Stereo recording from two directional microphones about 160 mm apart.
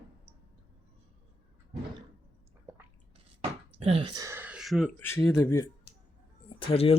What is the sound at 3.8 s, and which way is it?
Speech, 35° right (ahead or behind).